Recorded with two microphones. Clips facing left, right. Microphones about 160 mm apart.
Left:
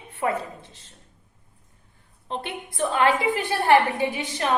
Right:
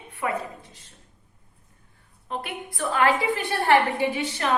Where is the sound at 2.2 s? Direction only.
25° left (ahead or behind).